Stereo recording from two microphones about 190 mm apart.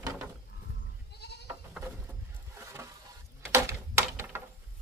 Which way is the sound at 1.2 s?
60° left (ahead or behind).